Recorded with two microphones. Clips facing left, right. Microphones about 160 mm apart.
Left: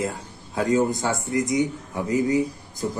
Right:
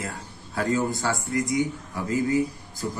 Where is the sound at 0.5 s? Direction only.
20° left (ahead or behind).